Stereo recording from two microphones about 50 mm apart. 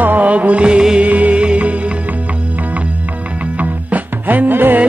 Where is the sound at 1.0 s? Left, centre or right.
Right.